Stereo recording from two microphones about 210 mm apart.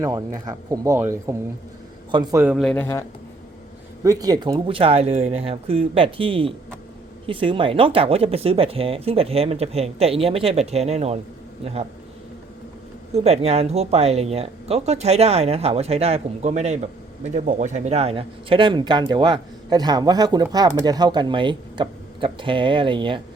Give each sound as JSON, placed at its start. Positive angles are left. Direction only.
{"t": 0.0, "sound": "a man's voice", "side_deg": -15}
{"t": 4.0, "sound": "speech", "side_deg": -15}
{"t": 13.1, "sound": "speech", "side_deg": -30}